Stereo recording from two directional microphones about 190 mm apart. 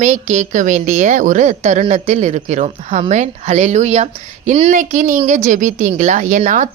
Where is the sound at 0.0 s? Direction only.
40° right (ahead or behind).